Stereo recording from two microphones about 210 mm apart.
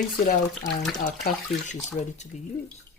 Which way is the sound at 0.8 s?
35° left (ahead or behind).